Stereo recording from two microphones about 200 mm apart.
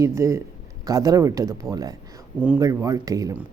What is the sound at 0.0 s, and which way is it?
Speech, 15° right (ahead or behind).